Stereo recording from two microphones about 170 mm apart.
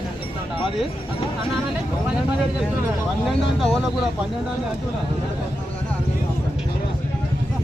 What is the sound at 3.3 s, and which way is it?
Vehicle, centre (ahead or behind).